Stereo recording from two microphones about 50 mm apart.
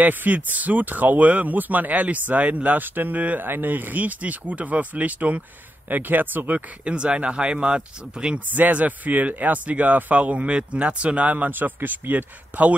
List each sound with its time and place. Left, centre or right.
0.0 s speech: right
6.8 s speech: right
8.5 s speech: right